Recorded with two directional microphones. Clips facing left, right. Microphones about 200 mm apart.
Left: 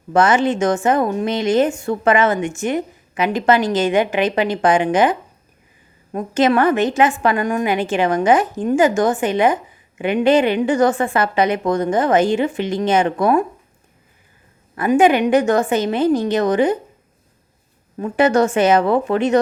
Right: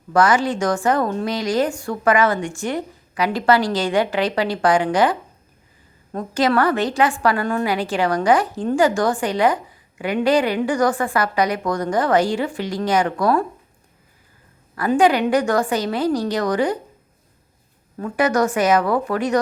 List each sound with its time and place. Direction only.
0.1 s a woman's voice: 25° left (ahead or behind)
14.8 s a woman's voice: 20° left (ahead or behind)
17.9 s a woman's voice: 25° left (ahead or behind)